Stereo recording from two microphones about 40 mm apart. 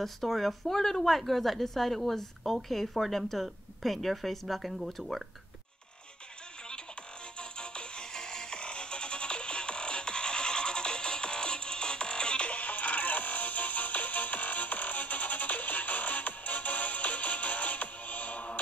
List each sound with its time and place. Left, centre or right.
0.0 s a woman's voice: centre
7.3 s music: left